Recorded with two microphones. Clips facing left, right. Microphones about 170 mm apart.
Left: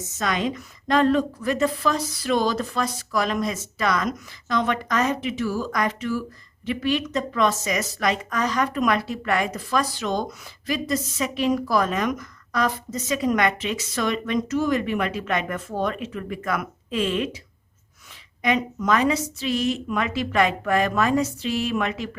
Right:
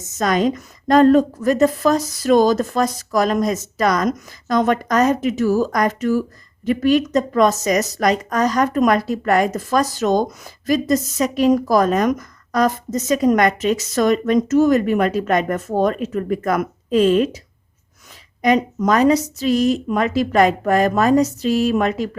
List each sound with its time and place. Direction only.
0.2 s a woman's voice: 40° right (ahead or behind)
18.4 s a woman's voice: 40° right (ahead or behind)